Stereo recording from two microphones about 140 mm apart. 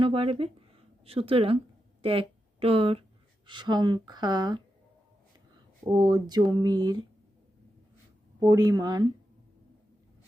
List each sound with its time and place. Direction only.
0.0 s speech: 40° right (ahead or behind)
5.8 s speech: 30° right (ahead or behind)
8.4 s speech: 25° right (ahead or behind)